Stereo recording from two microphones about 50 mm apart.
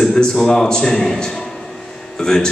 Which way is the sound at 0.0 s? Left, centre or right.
Centre.